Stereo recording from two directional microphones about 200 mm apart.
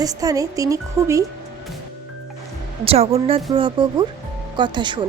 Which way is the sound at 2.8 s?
30° right (ahead or behind).